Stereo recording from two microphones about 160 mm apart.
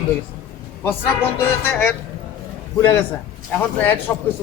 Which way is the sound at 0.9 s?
15° left (ahead or behind).